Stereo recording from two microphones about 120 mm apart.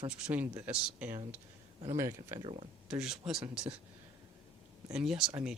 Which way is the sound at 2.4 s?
55° right (ahead or behind).